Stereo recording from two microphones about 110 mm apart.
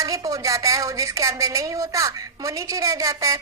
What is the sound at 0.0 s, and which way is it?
A woman's voice, 30° right (ahead or behind).